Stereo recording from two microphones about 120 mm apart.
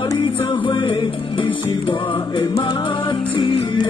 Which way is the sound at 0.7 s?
40° left (ahead or behind).